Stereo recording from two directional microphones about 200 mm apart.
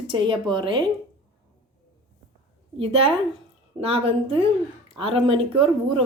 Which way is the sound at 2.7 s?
30° right (ahead or behind).